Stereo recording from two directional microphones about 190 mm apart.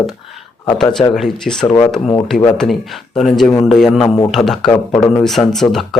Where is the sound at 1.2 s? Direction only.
Centre (ahead or behind).